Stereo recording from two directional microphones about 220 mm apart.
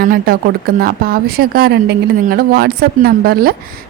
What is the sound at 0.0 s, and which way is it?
Speech, 40° right (ahead or behind).